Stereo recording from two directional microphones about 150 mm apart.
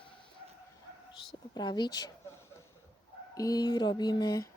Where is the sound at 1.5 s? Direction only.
30° left (ahead or behind).